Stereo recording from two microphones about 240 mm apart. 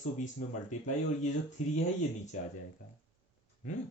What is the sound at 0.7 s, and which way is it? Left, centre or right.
Speech, left.